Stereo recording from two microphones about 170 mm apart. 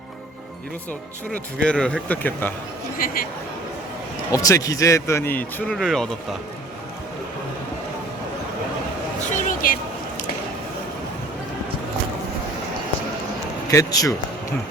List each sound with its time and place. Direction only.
1.6 s speech: 5° left (ahead or behind)
3.0 s speech: 60° left (ahead or behind)
4.3 s speech: 20° left (ahead or behind); by 6.1 s centre (ahead or behind)
9.3 s a sound: 55° left (ahead or behind)
13.7 s speech: 20° left (ahead or behind)